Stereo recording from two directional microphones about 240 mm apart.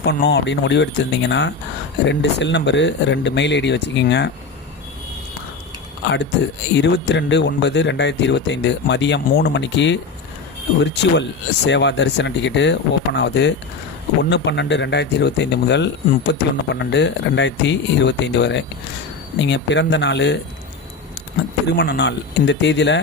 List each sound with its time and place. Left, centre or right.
0.0 s speech: left
6.7 s speech: left
21.8 s speech: left